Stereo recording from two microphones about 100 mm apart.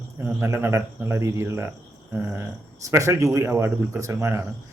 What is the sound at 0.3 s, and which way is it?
Speech, 25° right (ahead or behind).